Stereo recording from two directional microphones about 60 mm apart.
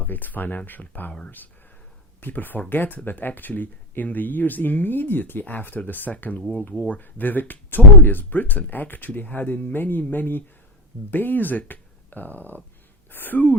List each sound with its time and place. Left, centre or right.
0.0 s speech: left
2.2 s speech: left